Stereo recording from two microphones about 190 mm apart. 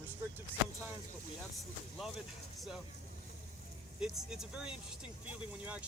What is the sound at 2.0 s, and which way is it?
Speech, centre (ahead or behind).